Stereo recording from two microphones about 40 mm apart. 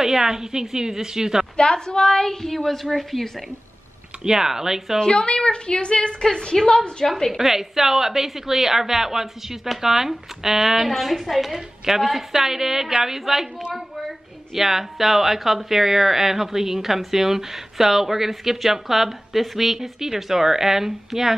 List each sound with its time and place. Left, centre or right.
0.0 s speech: centre
1.6 s speech: left
2.4 s a woman's voice: centre
4.2 s speech: centre
5.0 s speech: left
6.4 s a woman's voice: centre
7.1 s a woman's voice: centre
7.3 s speech: centre